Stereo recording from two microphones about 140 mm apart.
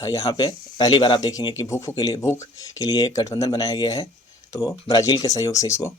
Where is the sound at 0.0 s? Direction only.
25° left (ahead or behind).